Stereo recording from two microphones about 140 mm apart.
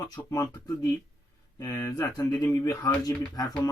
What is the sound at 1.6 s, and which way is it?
Speech, 15° left (ahead or behind).